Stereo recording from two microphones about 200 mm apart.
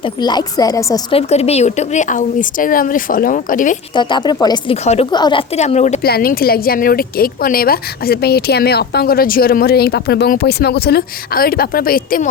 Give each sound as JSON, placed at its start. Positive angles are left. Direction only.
{"t": 0.0, "sound": "a woman's voice", "side_deg": 20}
{"t": 1.1, "sound": "a woman's voice", "side_deg": 30}
{"t": 3.9, "sound": "a woman's voice", "side_deg": 20}
{"t": 6.0, "sound": "speech", "side_deg": 50}